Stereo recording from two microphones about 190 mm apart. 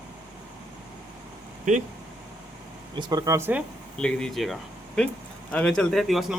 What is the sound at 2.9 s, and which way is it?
Speech, 20° right (ahead or behind).